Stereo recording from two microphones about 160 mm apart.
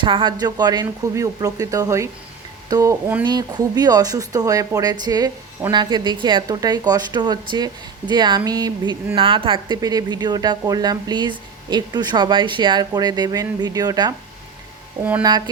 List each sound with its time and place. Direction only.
0.0 s a woman's voice: 30° right (ahead or behind)
3.2 s a woman's voice: 25° right (ahead or behind)
15.2 s a woman's voice: 25° right (ahead or behind)